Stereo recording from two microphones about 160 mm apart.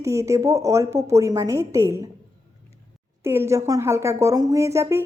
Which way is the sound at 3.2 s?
15° right (ahead or behind).